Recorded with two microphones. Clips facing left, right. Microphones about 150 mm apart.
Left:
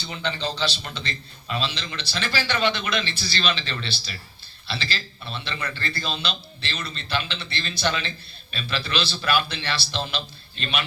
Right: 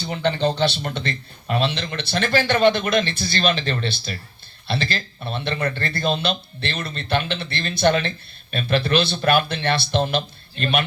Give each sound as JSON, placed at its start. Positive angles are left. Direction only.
{"t": 0.0, "sound": "speech", "side_deg": -55}